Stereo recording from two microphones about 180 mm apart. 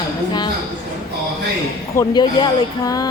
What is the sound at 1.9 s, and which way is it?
Speech, 25° left (ahead or behind).